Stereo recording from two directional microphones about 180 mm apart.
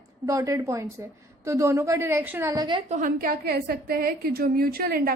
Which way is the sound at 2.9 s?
45° right (ahead or behind).